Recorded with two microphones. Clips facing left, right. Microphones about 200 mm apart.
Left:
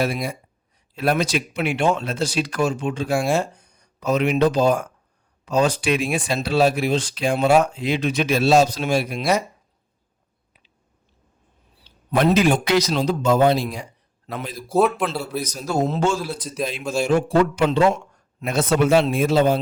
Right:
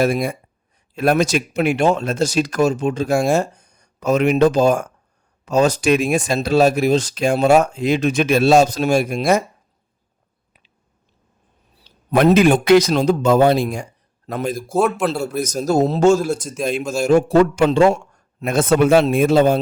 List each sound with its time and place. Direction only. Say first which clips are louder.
0.0 s speech: right 6 dB; 50° right (ahead or behind)
11.8 s speech: right 4 dB; 55° right (ahead or behind)